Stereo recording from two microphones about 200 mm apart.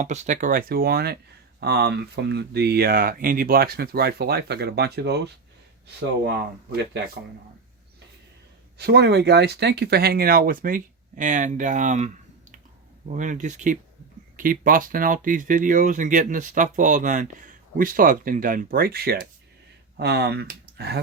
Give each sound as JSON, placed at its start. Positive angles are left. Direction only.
{"t": 0.0, "sound": "speech", "side_deg": -35}
{"t": 8.8, "sound": "speech", "side_deg": -55}